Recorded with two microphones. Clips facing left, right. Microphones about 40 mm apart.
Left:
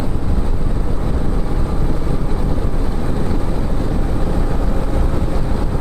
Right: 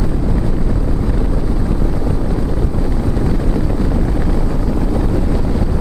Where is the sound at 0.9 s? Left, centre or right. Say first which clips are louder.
Right 3 dB; left.